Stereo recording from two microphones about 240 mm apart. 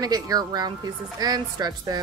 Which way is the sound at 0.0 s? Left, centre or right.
Centre.